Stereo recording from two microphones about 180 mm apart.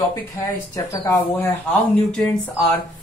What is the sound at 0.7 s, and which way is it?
Speech, 20° left (ahead or behind).